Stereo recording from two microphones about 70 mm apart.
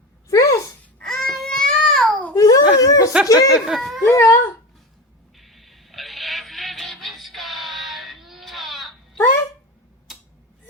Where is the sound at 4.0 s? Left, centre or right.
Left.